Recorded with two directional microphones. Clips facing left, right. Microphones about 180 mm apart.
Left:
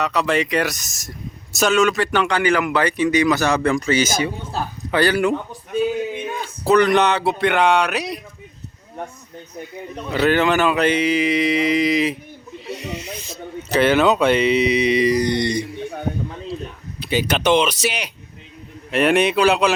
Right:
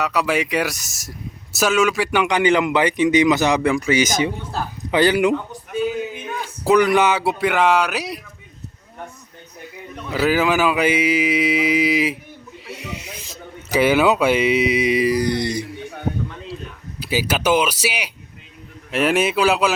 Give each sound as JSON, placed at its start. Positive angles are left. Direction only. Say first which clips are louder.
{"t": 0.0, "sound": "a man's voice", "louder": "left 1 dB", "side_deg": -5}
{"t": 6.7, "sound": "speech", "louder": "even", "side_deg": -10}
{"t": 10.1, "sound": "a man's voice", "louder": "left 1 dB", "side_deg": -5}
{"t": 12.5, "sound": "snake", "louder": "left 4 dB", "side_deg": -10}
{"t": 13.7, "sound": "a man's voice", "louder": "even", "side_deg": -10}
{"t": 17.0, "sound": "a man's voice", "louder": "left 1 dB", "side_deg": -5}